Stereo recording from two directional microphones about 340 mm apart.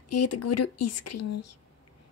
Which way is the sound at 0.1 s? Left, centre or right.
Left.